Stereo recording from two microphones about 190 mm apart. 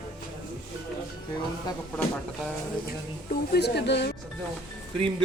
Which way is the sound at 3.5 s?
60° left (ahead or behind).